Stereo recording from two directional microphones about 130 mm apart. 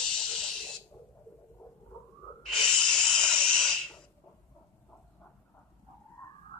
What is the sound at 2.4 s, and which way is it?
Breathing, 5° left (ahead or behind).